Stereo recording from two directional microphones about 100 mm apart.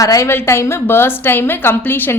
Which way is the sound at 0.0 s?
30° left (ahead or behind).